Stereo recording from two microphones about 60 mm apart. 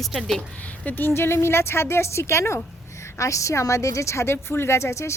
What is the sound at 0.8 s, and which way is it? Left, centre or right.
A woman's voice, left.